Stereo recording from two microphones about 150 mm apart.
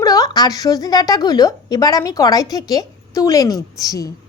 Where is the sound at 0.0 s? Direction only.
25° left (ahead or behind).